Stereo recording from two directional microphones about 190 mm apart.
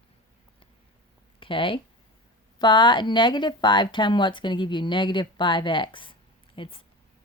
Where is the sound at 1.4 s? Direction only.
25° left (ahead or behind).